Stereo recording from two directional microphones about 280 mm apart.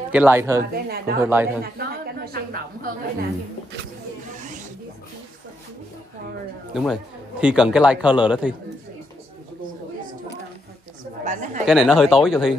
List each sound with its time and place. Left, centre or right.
0.1 s a woman's voice: centre
1.6 s a woman's voice: right
6.7 s speech: centre
11.2 s speech: right
11.6 s speech: centre